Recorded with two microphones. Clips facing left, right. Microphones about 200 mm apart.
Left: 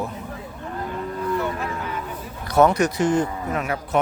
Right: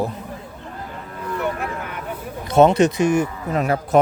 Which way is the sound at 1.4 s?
60° right (ahead or behind).